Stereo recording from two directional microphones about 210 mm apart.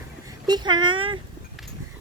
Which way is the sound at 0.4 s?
20° right (ahead or behind).